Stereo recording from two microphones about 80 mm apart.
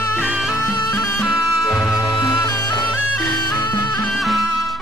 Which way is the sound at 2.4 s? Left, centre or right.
Left.